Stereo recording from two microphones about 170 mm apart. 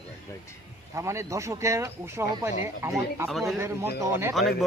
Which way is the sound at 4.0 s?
15° right (ahead or behind).